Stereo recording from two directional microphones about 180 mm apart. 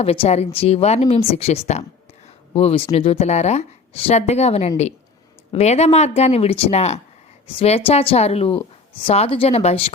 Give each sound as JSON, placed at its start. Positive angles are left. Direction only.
{"t": 0.0, "sound": "speech", "side_deg": 35}